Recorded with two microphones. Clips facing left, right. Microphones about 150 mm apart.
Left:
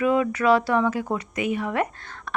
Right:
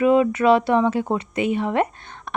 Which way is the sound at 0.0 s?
25° right (ahead or behind).